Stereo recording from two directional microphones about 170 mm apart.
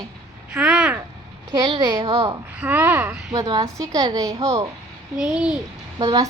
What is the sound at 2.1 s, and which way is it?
Speech, 35° right (ahead or behind).